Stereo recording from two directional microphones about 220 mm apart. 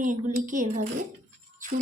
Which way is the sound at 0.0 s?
35° right (ahead or behind).